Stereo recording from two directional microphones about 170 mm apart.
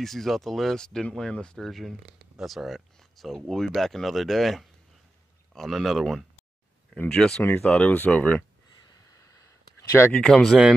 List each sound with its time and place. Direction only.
0.0 s speech: centre (ahead or behind)
9.8 s speech: 15° left (ahead or behind)
10.1 s speech: 5° left (ahead or behind)